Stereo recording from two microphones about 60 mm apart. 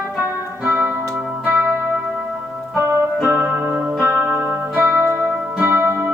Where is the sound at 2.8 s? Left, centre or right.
Right.